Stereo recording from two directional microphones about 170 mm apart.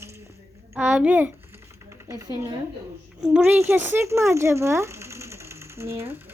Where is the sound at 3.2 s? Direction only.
5° right (ahead or behind).